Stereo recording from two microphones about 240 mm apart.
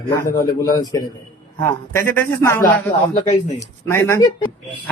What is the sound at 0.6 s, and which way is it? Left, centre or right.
Speech, centre.